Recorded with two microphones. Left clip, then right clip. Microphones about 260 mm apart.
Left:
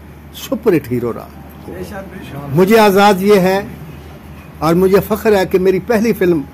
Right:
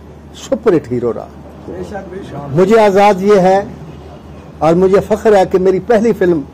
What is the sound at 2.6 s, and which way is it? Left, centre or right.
A man's voice, left.